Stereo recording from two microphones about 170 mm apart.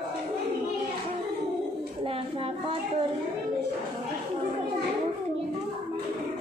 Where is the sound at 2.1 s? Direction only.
35° right (ahead or behind).